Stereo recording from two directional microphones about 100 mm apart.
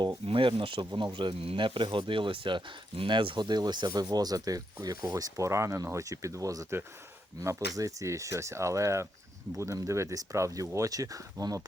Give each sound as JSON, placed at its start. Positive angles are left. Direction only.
{"t": 0.3, "sound": "speech", "side_deg": -60}